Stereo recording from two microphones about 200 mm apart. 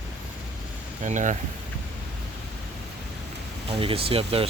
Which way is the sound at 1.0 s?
40° right (ahead or behind).